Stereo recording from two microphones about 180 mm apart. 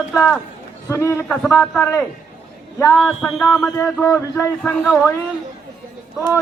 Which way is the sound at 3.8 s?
15° left (ahead or behind).